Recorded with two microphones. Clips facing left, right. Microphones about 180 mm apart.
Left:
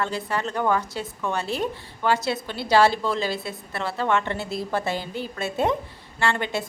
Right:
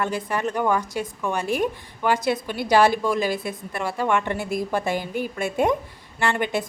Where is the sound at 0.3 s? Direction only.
15° right (ahead or behind).